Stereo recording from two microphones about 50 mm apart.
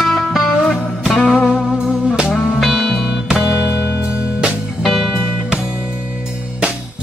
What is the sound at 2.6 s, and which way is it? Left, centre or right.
Music, centre.